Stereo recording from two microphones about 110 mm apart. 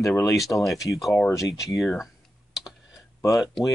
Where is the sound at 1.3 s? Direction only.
30° left (ahead or behind).